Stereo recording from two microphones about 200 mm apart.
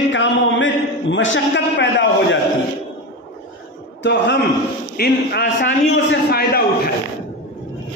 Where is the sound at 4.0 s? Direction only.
60° left (ahead or behind).